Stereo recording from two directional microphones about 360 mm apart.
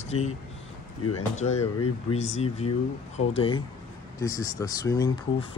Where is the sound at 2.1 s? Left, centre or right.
Centre.